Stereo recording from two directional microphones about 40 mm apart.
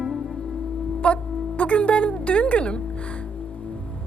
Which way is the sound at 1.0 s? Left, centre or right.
Left.